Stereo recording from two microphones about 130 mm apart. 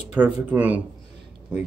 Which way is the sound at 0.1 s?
15° right (ahead or behind).